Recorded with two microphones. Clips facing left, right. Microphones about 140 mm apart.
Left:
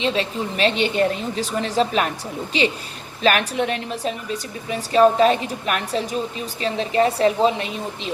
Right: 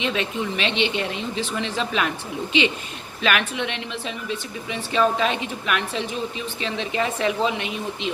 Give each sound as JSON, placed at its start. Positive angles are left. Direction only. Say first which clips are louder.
{"t": 0.0, "sound": "a woman's voice", "louder": "left 2 dB", "side_deg": 35}